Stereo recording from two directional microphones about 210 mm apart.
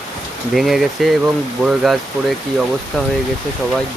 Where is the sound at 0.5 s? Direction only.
Centre (ahead or behind).